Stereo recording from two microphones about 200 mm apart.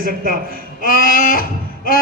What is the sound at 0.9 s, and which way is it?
Speech, 45° left (ahead or behind).